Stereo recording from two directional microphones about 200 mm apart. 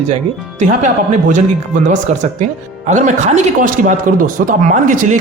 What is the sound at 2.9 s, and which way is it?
Speech, 35° right (ahead or behind).